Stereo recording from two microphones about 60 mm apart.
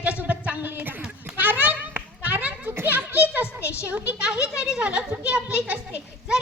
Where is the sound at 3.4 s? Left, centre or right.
Left.